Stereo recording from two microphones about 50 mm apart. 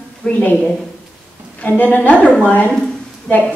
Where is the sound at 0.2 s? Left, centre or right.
Left.